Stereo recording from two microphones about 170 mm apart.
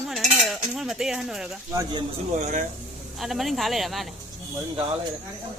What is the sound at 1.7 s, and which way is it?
Speech, 20° right (ahead or behind).